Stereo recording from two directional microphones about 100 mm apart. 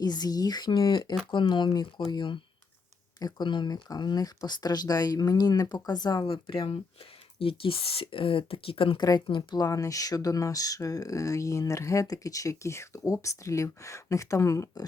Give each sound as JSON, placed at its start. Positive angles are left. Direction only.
{"t": 0.0, "sound": "speech", "side_deg": 40}
{"t": 6.2, "sound": "speech", "side_deg": 60}
{"t": 9.0, "sound": "speech", "side_deg": 40}
{"t": 9.2, "sound": "speech", "side_deg": 55}
{"t": 9.6, "sound": "speech", "side_deg": 35}